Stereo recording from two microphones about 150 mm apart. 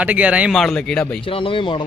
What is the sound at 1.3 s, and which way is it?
Speech, 35° left (ahead or behind).